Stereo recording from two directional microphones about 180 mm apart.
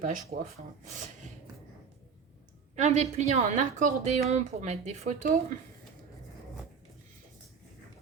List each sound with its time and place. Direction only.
0.0 s speech: 45° right (ahead or behind)
2.7 s a woman's voice: 40° right (ahead or behind)